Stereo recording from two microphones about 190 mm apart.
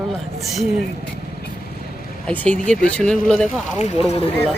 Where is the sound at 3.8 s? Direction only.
35° left (ahead or behind).